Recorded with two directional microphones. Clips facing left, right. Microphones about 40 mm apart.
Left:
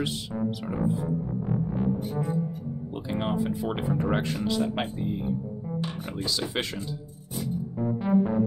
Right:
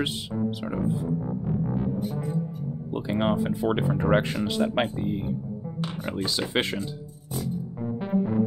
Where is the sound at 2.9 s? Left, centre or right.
Right.